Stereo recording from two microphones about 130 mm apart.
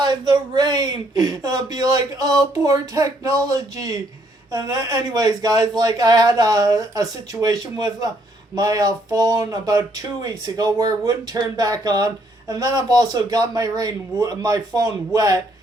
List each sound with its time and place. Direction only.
0.0 s speech: 35° right (ahead or behind)